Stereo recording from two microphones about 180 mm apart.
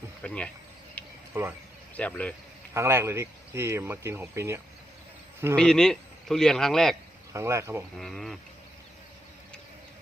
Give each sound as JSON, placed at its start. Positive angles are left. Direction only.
{"t": 0.2, "sound": "speech", "side_deg": 5}
{"t": 1.0, "sound": "a sound", "side_deg": 10}
{"t": 1.3, "sound": "speech", "side_deg": -10}
{"t": 2.0, "sound": "speech", "side_deg": 5}
{"t": 2.7, "sound": "speech", "side_deg": -15}
{"t": 5.5, "sound": "speech", "side_deg": 5}
{"t": 7.3, "sound": "speech", "side_deg": -15}
{"t": 7.9, "sound": "speech", "side_deg": 0}